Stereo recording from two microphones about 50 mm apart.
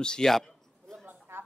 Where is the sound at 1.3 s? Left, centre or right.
Right.